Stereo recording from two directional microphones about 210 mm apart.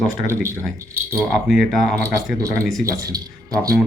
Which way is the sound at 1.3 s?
Centre (ahead or behind).